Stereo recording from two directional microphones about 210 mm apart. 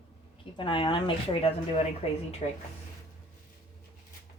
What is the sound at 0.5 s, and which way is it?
Speech, 20° left (ahead or behind).